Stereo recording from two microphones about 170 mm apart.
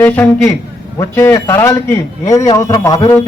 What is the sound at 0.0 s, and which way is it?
A man's voice, 10° left (ahead or behind).